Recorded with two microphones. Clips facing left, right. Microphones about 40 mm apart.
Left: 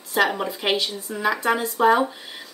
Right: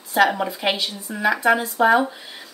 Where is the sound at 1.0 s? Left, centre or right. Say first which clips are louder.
Right 5 dB; centre.